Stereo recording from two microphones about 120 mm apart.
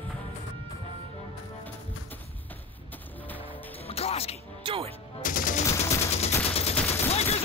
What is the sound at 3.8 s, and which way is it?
Music, 55° left (ahead or behind).